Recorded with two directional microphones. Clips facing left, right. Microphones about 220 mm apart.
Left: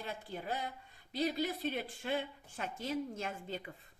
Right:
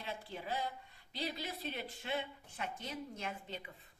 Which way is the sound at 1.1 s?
45° left (ahead or behind).